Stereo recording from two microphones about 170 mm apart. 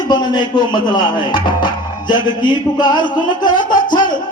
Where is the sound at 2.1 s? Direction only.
25° left (ahead or behind).